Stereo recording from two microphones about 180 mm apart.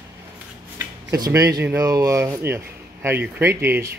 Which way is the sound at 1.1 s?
20° right (ahead or behind).